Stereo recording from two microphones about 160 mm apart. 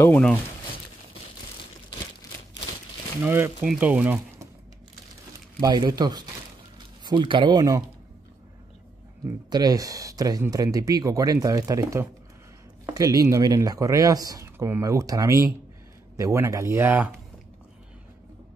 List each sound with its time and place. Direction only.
0.0 s speech: 10° left (ahead or behind)
3.2 s speech: 10° right (ahead or behind)
5.6 s speech: 25° right (ahead or behind)
9.2 s speech: 25° right (ahead or behind)